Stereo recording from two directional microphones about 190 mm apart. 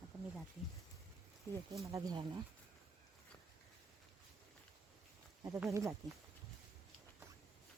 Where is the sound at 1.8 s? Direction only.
15° right (ahead or behind).